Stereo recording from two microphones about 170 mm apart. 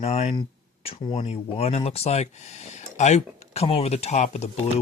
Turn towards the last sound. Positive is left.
turn(degrees=40)  # may be behind; listen again after turning